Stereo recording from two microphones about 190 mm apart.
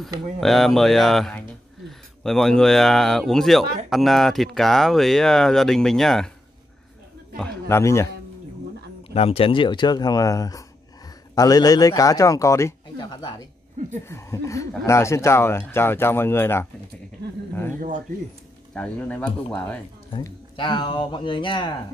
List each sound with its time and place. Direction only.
0.4 s speech: centre (ahead or behind)
7.3 s speech: 10° left (ahead or behind)
9.1 s a man's voice: 30° left (ahead or behind); by 16.6 s 10° left (ahead or behind)
18.8 s speech: 10° left (ahead or behind)
20.1 s a man's voice: 25° left (ahead or behind)